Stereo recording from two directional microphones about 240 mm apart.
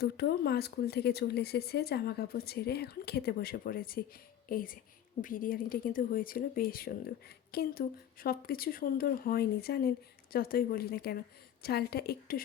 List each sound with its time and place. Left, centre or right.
0.0 s speech: left